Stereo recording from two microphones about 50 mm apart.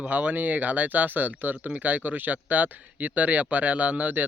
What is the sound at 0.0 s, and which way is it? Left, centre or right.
Speech, right.